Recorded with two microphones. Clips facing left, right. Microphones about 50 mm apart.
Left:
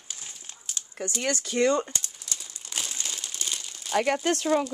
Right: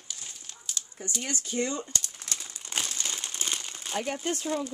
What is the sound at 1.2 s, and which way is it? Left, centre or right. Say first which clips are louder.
Speech: left 7 dB; left.